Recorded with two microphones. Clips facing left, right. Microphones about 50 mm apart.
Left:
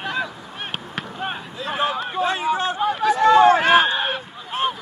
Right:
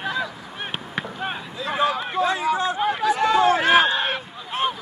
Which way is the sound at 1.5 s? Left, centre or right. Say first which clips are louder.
Right 2 dB; left.